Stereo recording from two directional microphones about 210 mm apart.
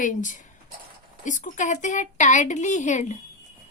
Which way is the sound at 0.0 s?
40° left (ahead or behind).